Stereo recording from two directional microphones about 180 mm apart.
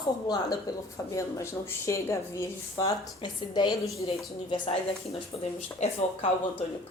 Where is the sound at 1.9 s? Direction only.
15° left (ahead or behind).